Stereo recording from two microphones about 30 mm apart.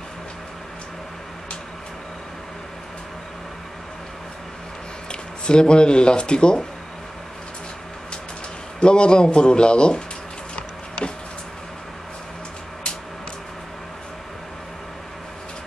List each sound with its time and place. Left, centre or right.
5.1 s speech: left
8.8 s a man's voice: left